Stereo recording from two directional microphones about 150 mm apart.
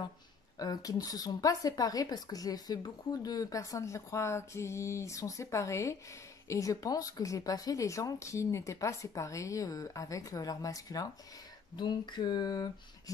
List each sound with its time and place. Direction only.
0.6 s speech: 25° left (ahead or behind)